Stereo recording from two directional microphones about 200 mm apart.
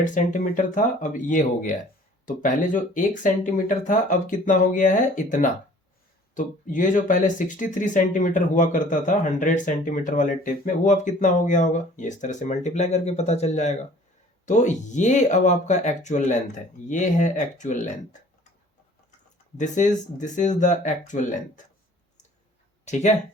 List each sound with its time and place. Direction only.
0.0 s speech: 40° left (ahead or behind)
19.5 s speech: 40° left (ahead or behind)
22.9 s speech: 35° left (ahead or behind)